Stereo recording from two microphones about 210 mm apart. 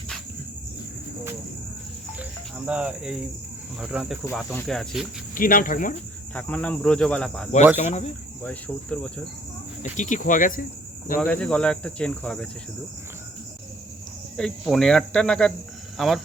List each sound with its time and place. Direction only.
2.6 s cricket: 5° right (ahead or behind)
5.3 s cricket: 40° left (ahead or behind)
6.3 s cricket: 5° left (ahead or behind)
7.8 s cricket: 35° left (ahead or behind)
8.4 s cricket: 5° left (ahead or behind)
9.8 s cricket: 35° left (ahead or behind)
11.2 s cricket: 5° left (ahead or behind)
14.3 s cricket: centre (ahead or behind)